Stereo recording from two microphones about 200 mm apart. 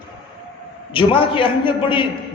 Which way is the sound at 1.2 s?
25° left (ahead or behind).